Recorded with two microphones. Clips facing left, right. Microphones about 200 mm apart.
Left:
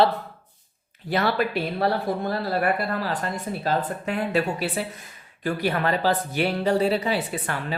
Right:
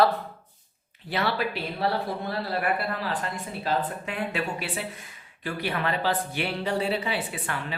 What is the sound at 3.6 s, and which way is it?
A woman's voice, 40° left (ahead or behind).